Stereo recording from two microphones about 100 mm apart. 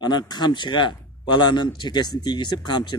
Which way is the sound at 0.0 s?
45° left (ahead or behind).